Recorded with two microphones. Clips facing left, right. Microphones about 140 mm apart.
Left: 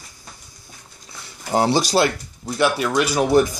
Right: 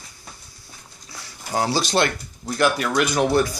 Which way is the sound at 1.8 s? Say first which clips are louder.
Left 3 dB; 5° left (ahead or behind).